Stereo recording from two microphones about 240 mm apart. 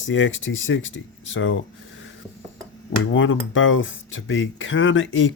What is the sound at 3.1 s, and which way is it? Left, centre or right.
Speech, left.